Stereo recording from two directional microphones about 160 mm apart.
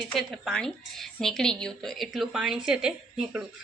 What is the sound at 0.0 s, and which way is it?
A woman's voice, centre (ahead or behind).